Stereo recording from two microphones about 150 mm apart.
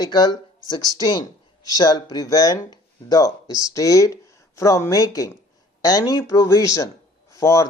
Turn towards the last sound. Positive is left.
turn(degrees=20)  # may be behind; listen again after turning